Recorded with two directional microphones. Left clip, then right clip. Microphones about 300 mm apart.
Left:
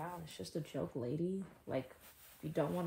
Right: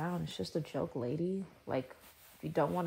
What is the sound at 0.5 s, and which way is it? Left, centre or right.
Speech, right.